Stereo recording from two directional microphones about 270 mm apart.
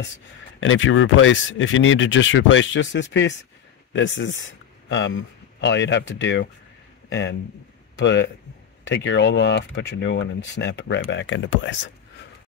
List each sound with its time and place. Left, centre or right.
0.6 s speech: left